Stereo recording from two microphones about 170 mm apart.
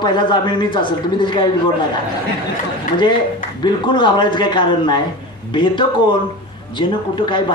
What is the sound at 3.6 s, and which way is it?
Speech, 25° left (ahead or behind).